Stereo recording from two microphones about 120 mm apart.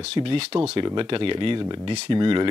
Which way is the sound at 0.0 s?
50° right (ahead or behind).